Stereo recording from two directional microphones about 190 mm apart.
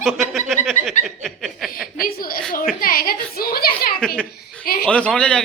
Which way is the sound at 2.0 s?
50° left (ahead or behind).